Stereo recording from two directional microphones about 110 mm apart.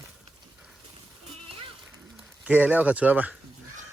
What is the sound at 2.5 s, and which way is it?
Speech, 15° right (ahead or behind).